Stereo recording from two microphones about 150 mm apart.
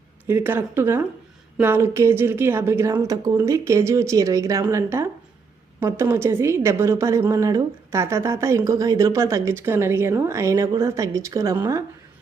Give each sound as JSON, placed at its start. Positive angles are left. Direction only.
{"t": 0.3, "sound": "a woman's voice", "side_deg": -15}